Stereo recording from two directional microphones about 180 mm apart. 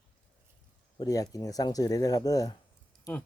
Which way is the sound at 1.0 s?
20° left (ahead or behind).